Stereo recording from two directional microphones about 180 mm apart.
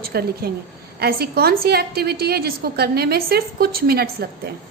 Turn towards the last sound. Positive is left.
turn(degrees=-60)  # may be behind; listen again after turning